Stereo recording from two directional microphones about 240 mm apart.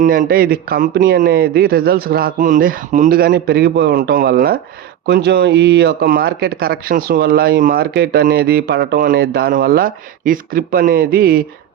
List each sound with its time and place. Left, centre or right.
0.0 s speech: right